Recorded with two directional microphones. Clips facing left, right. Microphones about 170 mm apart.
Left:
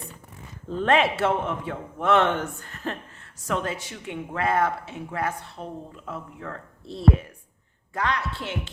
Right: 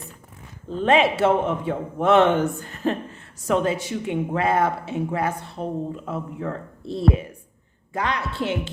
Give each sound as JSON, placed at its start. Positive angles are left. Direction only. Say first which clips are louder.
{"t": 0.7, "sound": "speech", "louder": "right 3 dB", "side_deg": -20}
{"t": 7.9, "sound": "speech", "louder": "right 2 dB", "side_deg": -20}